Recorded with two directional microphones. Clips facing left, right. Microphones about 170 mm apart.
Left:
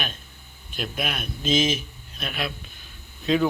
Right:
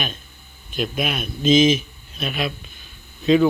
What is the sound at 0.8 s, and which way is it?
A man's voice, 10° right (ahead or behind).